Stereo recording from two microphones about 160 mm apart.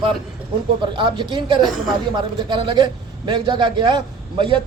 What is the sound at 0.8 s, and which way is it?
A man's voice, 30° right (ahead or behind).